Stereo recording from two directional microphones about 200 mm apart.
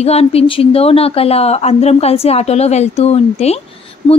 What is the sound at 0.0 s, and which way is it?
Speech, 30° left (ahead or behind).